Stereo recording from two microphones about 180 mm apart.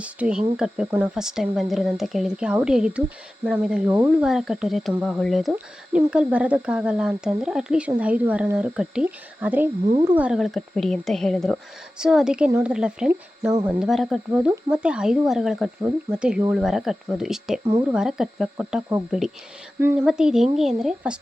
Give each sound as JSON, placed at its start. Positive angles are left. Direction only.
{"t": 0.0, "sound": "speech", "side_deg": -5}
{"t": 17.6, "sound": "speech", "side_deg": -35}
{"t": 17.8, "sound": "speech", "side_deg": -5}
{"t": 19.8, "sound": "speech", "side_deg": -10}